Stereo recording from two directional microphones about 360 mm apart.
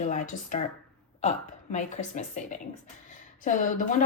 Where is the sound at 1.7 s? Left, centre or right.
Centre.